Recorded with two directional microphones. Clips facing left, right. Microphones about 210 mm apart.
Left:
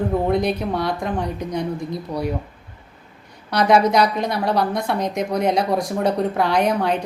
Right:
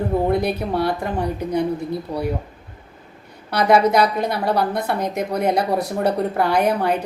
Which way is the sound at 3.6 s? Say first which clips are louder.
Even; 5° right (ahead or behind).